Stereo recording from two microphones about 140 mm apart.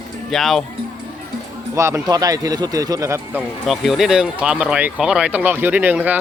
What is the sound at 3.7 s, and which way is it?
Speech, 5° right (ahead or behind).